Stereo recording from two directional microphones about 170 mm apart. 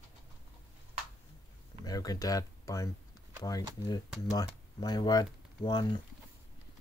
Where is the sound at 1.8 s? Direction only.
20° left (ahead or behind).